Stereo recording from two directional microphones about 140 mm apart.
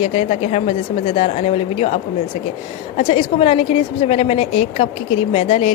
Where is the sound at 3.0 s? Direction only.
50° left (ahead or behind).